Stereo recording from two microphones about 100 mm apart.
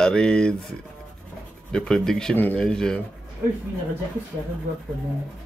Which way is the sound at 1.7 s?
5° left (ahead or behind).